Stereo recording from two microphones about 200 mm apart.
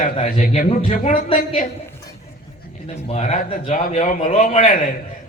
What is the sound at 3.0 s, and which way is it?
A man's voice, 35° left (ahead or behind).